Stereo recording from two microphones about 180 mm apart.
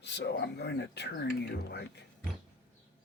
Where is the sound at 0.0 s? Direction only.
70° left (ahead or behind).